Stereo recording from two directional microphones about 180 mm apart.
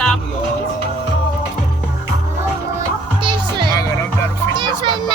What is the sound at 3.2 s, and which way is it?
Music, 25° right (ahead or behind).